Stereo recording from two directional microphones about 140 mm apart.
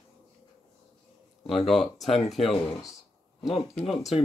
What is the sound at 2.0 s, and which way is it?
Speech, 50° left (ahead or behind).